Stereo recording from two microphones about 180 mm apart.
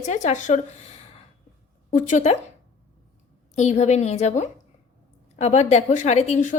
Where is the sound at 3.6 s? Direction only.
40° left (ahead or behind).